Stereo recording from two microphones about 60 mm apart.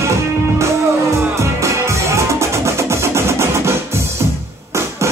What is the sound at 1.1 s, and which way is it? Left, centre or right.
Music, right.